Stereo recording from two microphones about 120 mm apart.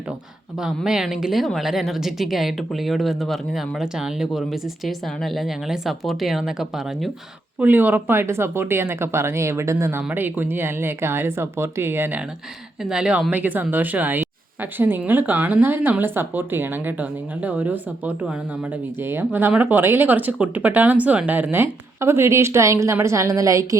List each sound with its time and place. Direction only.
0.9 s speech: 5° right (ahead or behind)
7.6 s speech: 15° right (ahead or behind)
12.8 s speech: 5° right (ahead or behind); by 23.6 s 25° right (ahead or behind)